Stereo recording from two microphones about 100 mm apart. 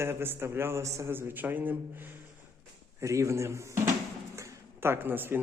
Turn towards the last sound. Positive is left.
turn(degrees=-20)  # may be behind; listen again after turning